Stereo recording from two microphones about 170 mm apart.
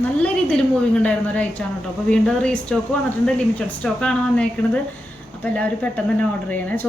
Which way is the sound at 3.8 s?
5° left (ahead or behind).